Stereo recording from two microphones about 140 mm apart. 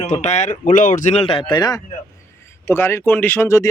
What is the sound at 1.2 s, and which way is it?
Speech, 40° left (ahead or behind).